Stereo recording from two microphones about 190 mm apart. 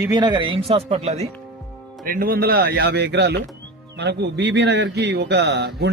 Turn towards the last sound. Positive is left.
turn(degrees=-60)  # may be behind; listen again after turning